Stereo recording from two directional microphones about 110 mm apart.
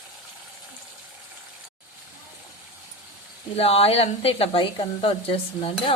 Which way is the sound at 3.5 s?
65° left (ahead or behind).